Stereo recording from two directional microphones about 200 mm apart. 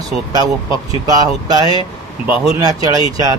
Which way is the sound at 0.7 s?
20° right (ahead or behind).